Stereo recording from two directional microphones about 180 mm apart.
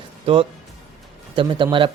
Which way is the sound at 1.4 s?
30° right (ahead or behind).